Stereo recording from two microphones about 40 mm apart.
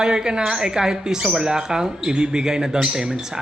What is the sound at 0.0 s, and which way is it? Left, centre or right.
Speech, centre.